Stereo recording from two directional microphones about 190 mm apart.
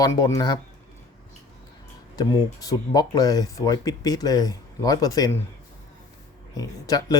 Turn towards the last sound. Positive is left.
turn(degrees=20)  # may be behind; listen again after turning